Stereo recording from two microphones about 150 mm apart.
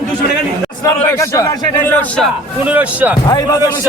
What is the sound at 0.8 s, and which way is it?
A man's voice, 20° left (ahead or behind).